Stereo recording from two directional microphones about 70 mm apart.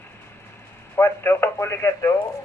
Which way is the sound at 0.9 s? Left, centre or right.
Left.